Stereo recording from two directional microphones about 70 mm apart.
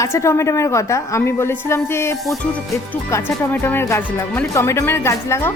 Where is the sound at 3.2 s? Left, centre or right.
Left.